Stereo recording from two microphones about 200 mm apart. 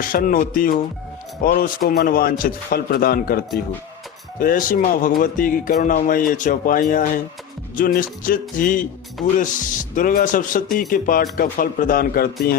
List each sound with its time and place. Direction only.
0.0 s speech: 45° left (ahead or behind)